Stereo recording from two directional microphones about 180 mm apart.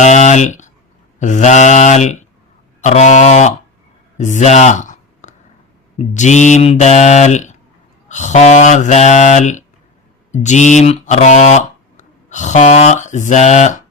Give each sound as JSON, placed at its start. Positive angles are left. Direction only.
{"t": 0.0, "sound": "speech", "side_deg": 40}